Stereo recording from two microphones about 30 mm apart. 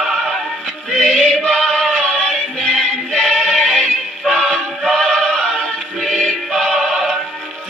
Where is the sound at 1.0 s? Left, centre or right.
Centre.